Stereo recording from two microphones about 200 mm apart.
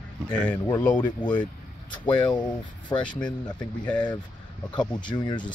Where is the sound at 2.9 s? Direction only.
20° left (ahead or behind).